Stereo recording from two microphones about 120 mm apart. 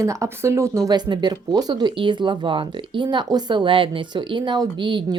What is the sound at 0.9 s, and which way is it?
Speech, 35° right (ahead or behind).